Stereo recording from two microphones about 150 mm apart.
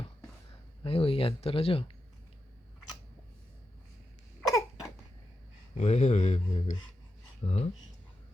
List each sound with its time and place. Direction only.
0.9 s speech: 40° left (ahead or behind)
4.4 s a sound: 25° left (ahead or behind)
5.7 s speech: 50° left (ahead or behind)